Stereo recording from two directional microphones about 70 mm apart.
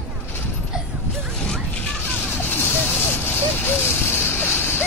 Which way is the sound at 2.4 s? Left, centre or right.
Left.